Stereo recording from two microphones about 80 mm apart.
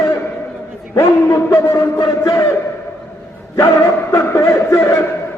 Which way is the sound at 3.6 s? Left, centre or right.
Left.